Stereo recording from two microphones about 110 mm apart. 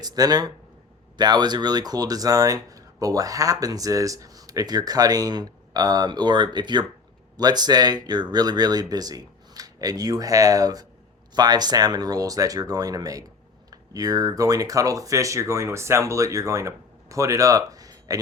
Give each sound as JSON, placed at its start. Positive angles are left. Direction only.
{"t": 0.0, "sound": "speech", "side_deg": -35}